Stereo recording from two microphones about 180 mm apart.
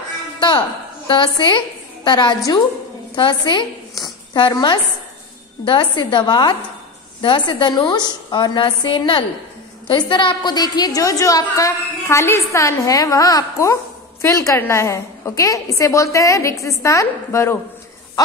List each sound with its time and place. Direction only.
0.4 s a woman's voice: 25° left (ahead or behind)